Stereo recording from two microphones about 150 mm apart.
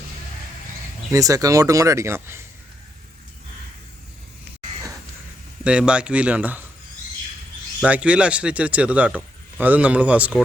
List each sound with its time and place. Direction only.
1.1 s speech: 25° right (ahead or behind)
5.6 s speech: 5° right (ahead or behind)
7.8 s speech: 10° right (ahead or behind)